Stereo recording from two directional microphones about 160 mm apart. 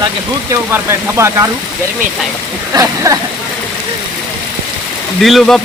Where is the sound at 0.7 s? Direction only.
20° right (ahead or behind).